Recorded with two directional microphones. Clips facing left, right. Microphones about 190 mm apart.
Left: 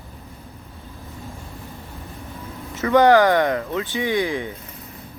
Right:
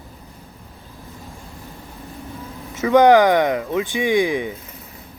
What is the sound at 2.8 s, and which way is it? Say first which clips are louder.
Speech: right 2 dB; 15° right (ahead or behind).